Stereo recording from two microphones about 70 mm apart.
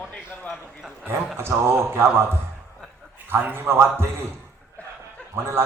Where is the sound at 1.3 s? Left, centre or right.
Right.